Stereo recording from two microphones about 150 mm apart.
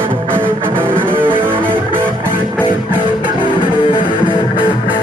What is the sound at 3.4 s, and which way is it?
Music, 35° left (ahead or behind).